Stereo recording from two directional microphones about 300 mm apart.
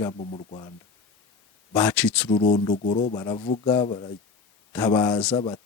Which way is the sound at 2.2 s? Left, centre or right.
Left.